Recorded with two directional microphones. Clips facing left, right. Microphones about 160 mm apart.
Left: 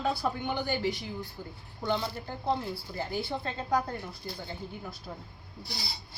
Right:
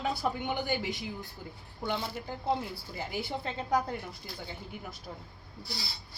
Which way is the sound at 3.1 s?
20° right (ahead or behind).